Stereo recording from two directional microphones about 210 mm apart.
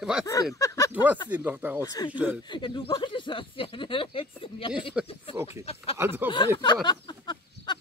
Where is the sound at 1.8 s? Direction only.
15° left (ahead or behind).